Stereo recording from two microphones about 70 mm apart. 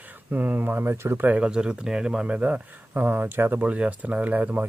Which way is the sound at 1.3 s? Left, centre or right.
Centre.